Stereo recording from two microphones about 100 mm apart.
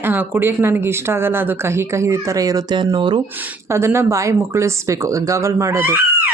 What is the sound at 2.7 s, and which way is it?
Speech, 50° right (ahead or behind).